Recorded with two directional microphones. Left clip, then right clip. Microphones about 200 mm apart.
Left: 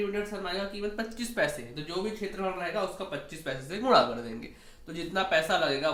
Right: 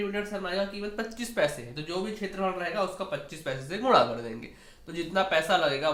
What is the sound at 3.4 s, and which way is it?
A man's voice, 30° right (ahead or behind).